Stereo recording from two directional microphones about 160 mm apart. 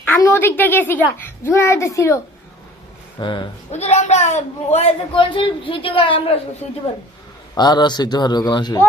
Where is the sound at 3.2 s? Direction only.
30° left (ahead or behind).